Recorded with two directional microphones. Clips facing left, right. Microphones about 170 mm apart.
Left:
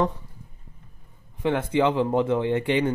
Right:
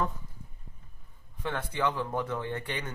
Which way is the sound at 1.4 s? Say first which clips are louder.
Left 9 dB; 20° left (ahead or behind).